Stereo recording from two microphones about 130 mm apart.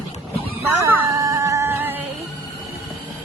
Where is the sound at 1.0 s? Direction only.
25° right (ahead or behind).